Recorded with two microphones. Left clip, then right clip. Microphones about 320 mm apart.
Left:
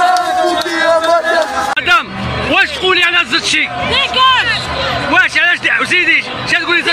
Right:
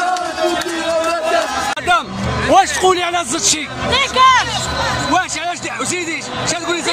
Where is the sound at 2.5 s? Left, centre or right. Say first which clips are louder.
Even; right.